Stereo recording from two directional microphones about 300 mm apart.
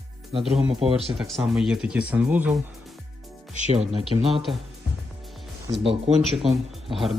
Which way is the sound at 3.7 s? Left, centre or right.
Centre.